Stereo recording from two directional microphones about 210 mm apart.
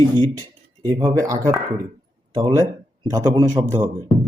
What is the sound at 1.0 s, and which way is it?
Speech, 15° right (ahead or behind).